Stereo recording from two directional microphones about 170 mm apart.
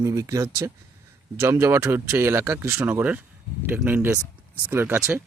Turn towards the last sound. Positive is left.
turn(degrees=-10)  # may be behind; listen again after turning